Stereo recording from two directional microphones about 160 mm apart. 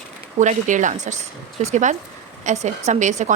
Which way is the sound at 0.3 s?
50° right (ahead or behind).